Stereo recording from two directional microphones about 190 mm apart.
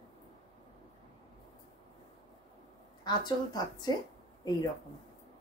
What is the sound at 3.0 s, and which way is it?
Speech, 20° left (ahead or behind).